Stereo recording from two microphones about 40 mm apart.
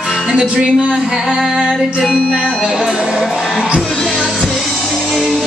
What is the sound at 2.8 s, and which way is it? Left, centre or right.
Speech, centre.